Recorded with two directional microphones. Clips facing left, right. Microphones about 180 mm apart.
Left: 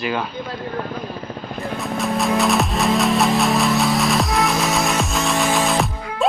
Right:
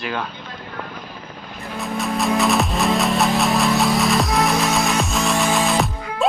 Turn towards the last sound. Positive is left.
turn(degrees=0)  # may be behind; listen again after turning